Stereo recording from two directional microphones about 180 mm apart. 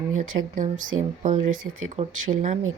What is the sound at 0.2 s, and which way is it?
Speech, 45° right (ahead or behind).